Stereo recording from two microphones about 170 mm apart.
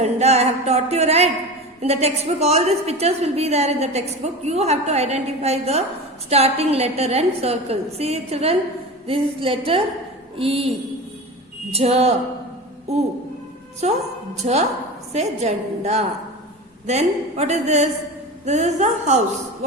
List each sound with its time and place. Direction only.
0.0 s a sound: 40° right (ahead or behind)
1.8 s a woman's voice: 40° right (ahead or behind)
11.7 s a woman's voice: 35° right (ahead or behind)
14.4 s a woman's voice: 40° right (ahead or behind)